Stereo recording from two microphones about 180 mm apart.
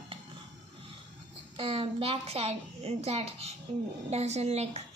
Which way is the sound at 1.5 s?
30° right (ahead or behind).